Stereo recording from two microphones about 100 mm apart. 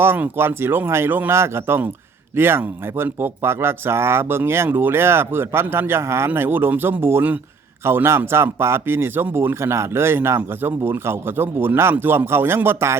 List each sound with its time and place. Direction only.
0.0 s speech: 25° right (ahead or behind)